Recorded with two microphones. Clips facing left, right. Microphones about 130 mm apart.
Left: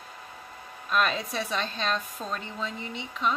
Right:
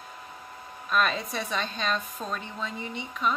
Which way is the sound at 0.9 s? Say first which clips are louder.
Even; centre (ahead or behind).